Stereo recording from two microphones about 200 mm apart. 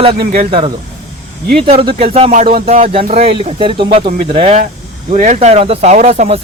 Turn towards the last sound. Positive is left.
turn(degrees=-30)  # may be behind; listen again after turning